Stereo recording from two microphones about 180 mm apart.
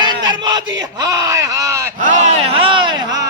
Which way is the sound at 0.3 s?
25° right (ahead or behind).